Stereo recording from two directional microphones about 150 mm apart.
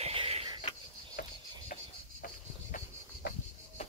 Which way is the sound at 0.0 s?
40° right (ahead or behind).